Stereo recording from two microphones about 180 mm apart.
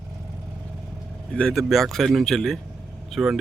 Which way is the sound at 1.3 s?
5° left (ahead or behind).